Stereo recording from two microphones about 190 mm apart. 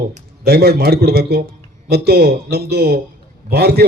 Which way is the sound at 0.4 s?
55° right (ahead or behind).